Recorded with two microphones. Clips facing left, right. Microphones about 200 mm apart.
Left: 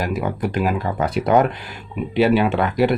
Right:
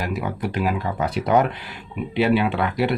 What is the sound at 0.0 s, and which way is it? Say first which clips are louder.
Speech: left 3 dB; 45° left (ahead or behind).